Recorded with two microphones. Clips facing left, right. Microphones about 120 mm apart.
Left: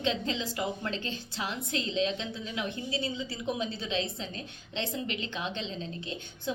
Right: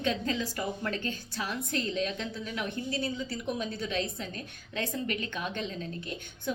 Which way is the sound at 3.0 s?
20° left (ahead or behind).